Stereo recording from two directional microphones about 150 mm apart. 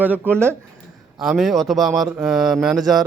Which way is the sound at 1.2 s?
Centre (ahead or behind).